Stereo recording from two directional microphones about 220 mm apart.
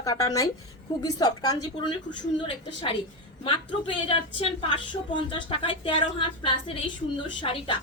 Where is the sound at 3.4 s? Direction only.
25° left (ahead or behind).